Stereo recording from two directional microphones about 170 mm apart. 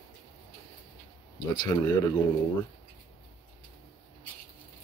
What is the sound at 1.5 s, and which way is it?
Speech, 25° left (ahead or behind).